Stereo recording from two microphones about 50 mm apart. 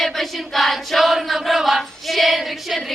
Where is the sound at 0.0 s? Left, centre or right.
Centre.